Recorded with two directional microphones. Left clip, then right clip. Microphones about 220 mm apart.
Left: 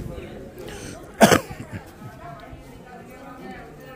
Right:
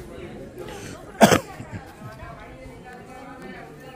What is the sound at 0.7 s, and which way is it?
Cough, 5° left (ahead or behind).